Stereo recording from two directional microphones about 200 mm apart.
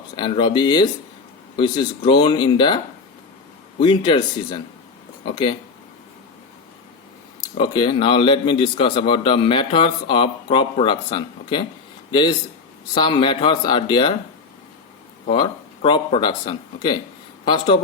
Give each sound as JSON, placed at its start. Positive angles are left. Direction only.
{"t": 0.2, "sound": "a man's voice", "side_deg": 25}
{"t": 7.5, "sound": "a man's voice", "side_deg": 25}
{"t": 15.3, "sound": "a man's voice", "side_deg": 25}